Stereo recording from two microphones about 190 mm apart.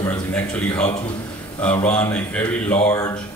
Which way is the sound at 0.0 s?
5° left (ahead or behind).